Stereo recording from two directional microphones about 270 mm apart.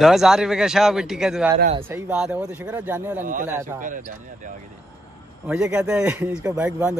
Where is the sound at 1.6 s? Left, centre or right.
Right.